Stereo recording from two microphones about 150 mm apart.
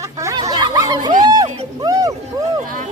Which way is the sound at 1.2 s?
25° right (ahead or behind).